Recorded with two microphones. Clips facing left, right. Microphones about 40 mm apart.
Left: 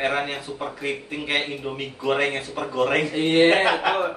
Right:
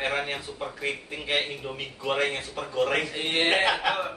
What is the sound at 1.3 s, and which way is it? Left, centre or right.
Speech, centre.